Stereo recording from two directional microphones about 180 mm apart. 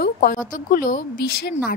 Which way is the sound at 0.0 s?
55° left (ahead or behind).